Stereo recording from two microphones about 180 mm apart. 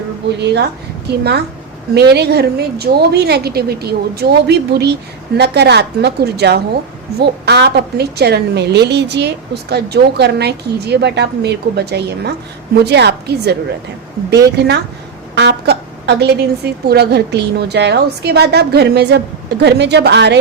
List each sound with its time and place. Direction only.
1.0 s a woman's voice: 65° right (ahead or behind)